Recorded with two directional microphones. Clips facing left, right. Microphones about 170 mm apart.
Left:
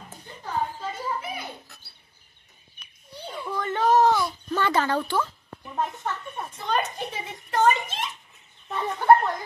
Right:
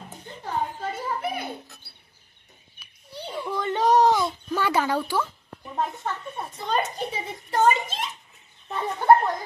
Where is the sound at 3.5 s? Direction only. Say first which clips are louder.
Right 1 dB; 15° right (ahead or behind).